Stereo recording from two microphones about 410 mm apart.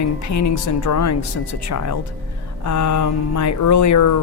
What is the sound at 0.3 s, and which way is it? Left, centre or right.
Speech, left.